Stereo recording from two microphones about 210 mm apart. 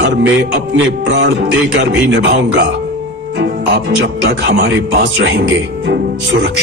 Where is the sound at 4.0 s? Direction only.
55° right (ahead or behind).